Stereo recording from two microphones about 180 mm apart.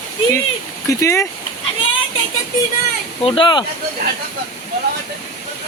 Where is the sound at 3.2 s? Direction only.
30° left (ahead or behind).